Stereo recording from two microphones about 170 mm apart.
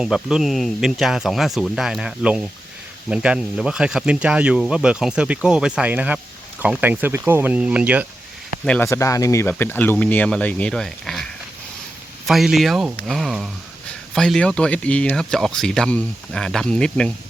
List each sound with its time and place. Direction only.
0.0 s speech: 5° right (ahead or behind)
8.6 s speech: 5° left (ahead or behind)
8.9 s speech: 20° left (ahead or behind)